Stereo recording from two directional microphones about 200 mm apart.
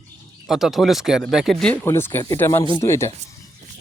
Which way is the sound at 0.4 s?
Centre (ahead or behind).